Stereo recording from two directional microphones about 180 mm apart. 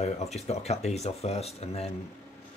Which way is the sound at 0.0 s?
35° left (ahead or behind).